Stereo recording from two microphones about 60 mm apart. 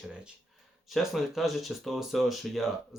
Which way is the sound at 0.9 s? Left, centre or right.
Centre.